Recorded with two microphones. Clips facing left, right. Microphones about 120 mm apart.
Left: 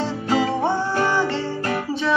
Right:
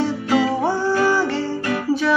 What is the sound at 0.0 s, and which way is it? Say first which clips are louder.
Music: right 2 dB; 30° left (ahead or behind).